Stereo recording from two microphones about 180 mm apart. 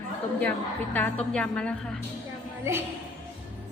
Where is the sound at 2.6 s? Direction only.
15° right (ahead or behind).